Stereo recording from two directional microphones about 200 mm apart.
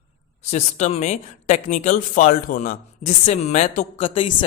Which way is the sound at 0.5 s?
35° left (ahead or behind).